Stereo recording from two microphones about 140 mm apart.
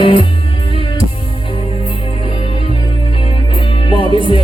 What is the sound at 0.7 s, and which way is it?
Music, 40° left (ahead or behind).